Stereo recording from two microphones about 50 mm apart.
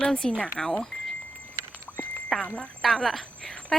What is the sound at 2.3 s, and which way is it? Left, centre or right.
Speech, centre.